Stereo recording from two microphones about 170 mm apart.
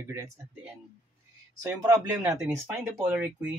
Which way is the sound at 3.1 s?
10° right (ahead or behind).